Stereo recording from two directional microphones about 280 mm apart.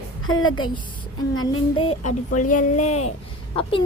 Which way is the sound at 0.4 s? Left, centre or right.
Centre.